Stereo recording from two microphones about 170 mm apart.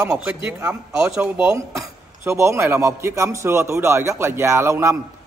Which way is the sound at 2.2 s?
15° right (ahead or behind).